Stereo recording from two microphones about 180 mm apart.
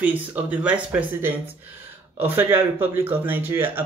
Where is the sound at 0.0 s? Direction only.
10° right (ahead or behind).